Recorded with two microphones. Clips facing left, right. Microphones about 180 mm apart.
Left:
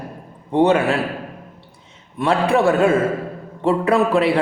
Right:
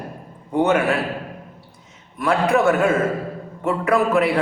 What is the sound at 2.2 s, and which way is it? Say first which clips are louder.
A man's voice: left 1 dB; 30° left (ahead or behind).